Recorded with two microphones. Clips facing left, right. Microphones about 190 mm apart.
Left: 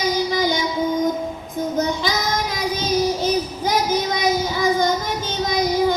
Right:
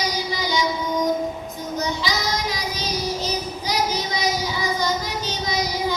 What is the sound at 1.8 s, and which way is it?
Child singing, 50° left (ahead or behind).